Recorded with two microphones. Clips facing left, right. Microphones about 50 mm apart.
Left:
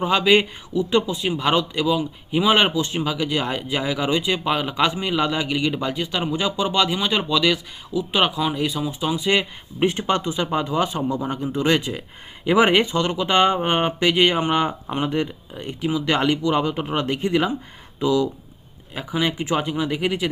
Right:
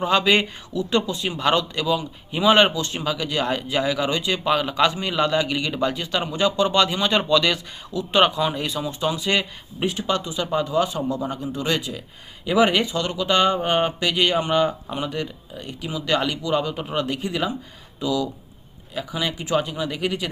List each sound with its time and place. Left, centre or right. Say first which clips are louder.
0.0 s speech: left 2 dB; centre
9.8 s speech: left 3 dB; left; by 20.3 s centre